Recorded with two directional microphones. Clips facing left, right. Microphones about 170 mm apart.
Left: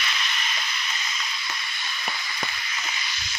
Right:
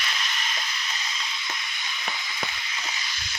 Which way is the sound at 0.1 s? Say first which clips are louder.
Left 1 dB; 40° right (ahead or behind).